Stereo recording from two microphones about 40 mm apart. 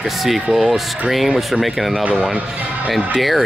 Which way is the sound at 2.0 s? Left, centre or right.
Right.